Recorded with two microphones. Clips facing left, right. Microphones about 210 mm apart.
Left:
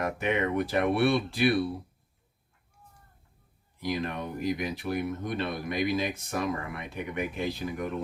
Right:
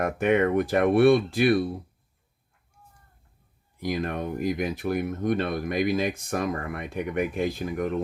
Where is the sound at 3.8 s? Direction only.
50° right (ahead or behind).